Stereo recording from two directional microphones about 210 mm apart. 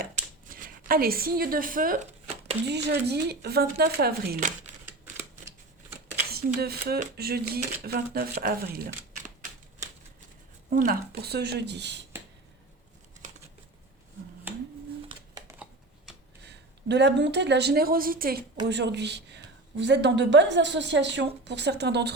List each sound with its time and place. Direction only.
0.5 s speech: 45° right (ahead or behind)
2.6 s speech: 50° right (ahead or behind)
6.3 s speech: 50° right (ahead or behind)
9.2 s typewriter: 35° right (ahead or behind)
10.7 s speech: 45° right (ahead or behind)
15.1 s a sound: 20° right (ahead or behind)
16.4 s a woman's voice: 55° right (ahead or behind)